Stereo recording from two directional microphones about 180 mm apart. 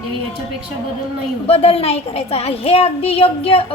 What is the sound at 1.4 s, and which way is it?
A woman's voice, 35° left (ahead or behind).